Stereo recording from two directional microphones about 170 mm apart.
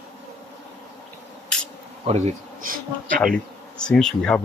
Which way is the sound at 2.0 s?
40° right (ahead or behind).